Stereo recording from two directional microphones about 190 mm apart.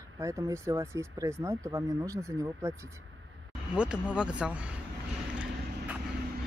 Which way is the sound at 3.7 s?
5° right (ahead or behind).